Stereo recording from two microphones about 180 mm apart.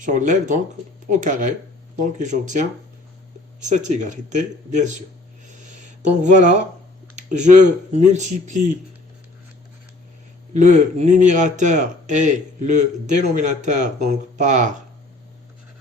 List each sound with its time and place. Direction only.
0.0 s speech: 45° right (ahead or behind)
3.7 s speech: 45° right (ahead or behind)
5.5 s a sound: 45° right (ahead or behind)
7.2 s speech: 40° right (ahead or behind)
10.5 s speech: 40° right (ahead or behind)